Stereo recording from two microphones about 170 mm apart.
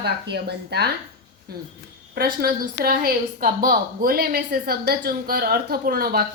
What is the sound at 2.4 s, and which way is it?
A woman's voice, 60° right (ahead or behind).